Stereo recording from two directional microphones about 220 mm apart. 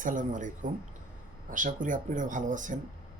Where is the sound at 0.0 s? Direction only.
35° right (ahead or behind).